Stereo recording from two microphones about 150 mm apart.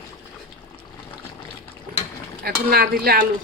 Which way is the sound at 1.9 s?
65° right (ahead or behind).